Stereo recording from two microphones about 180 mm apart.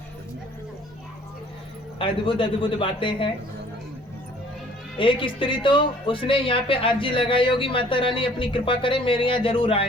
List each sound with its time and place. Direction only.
2.0 s speech: 30° left (ahead or behind)
4.9 s speech: 30° left (ahead or behind)